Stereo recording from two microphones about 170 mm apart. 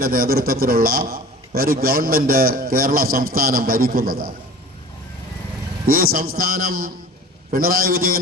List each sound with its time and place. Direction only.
0.0 s a man's voice: 60° right (ahead or behind)
5.8 s a man's voice: 55° right (ahead or behind)